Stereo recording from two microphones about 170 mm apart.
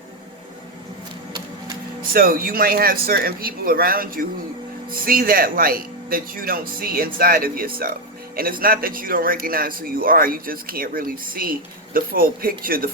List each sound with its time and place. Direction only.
2.1 s speech: 60° right (ahead or behind)